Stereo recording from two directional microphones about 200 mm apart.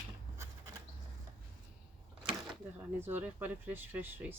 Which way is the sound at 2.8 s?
10° right (ahead or behind).